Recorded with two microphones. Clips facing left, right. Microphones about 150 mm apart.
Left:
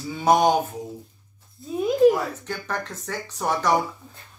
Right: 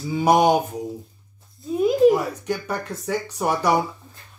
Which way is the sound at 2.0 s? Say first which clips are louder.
Left 1 dB; 10° right (ahead or behind).